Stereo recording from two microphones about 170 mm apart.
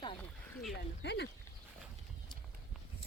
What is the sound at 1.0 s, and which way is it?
Speech, 80° left.